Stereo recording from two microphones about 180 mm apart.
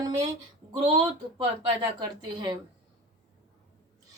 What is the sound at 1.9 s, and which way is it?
Speech, 25° right (ahead or behind).